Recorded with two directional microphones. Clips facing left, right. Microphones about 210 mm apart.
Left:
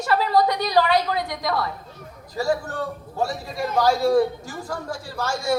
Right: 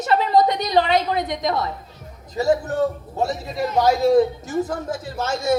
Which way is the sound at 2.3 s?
20° right (ahead or behind).